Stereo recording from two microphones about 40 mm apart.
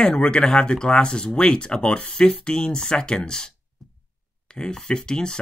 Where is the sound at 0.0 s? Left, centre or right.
Centre.